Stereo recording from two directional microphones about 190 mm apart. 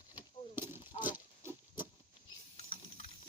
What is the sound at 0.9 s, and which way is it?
Pig, 35° left (ahead or behind).